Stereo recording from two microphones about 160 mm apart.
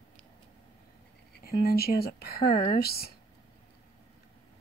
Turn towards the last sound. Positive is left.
turn(degrees=70)  # may be behind; listen again after turning